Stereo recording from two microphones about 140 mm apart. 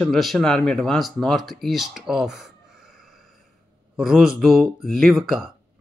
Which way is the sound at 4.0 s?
5° right (ahead or behind).